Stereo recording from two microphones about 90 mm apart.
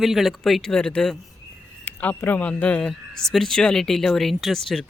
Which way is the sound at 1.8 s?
20° left (ahead or behind).